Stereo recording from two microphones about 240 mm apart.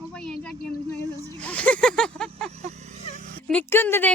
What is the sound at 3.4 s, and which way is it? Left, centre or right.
Speech, centre.